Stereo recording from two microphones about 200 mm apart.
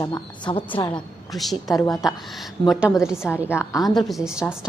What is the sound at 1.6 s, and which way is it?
Speech, 15° left (ahead or behind).